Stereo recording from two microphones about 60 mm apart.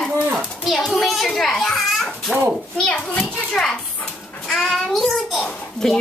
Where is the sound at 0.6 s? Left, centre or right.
Centre.